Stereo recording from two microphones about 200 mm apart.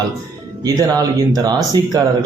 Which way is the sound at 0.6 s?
15° right (ahead or behind).